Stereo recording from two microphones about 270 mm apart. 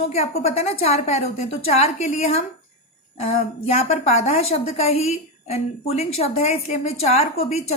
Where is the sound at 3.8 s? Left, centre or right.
Left.